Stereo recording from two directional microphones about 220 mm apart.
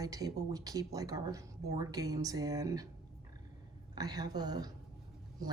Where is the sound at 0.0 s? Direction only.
15° right (ahead or behind).